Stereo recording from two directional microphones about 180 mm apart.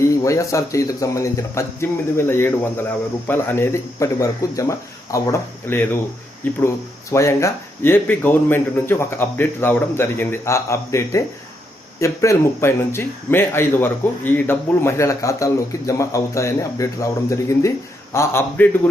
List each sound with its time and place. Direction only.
0.0 s speech: 15° left (ahead or behind)